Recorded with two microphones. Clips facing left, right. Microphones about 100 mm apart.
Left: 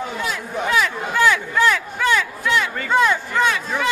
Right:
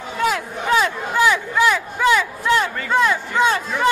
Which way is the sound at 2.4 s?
35° right (ahead or behind).